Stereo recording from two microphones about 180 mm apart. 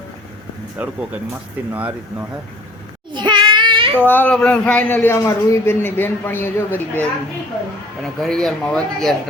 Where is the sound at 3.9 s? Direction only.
10° left (ahead or behind).